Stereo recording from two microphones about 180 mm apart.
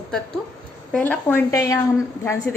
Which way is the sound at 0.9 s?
10° left (ahead or behind).